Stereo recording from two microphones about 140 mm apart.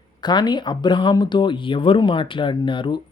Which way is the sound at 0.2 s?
30° left (ahead or behind).